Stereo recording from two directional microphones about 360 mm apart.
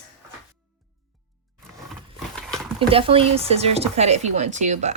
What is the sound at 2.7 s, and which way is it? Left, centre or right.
A woman's voice, centre.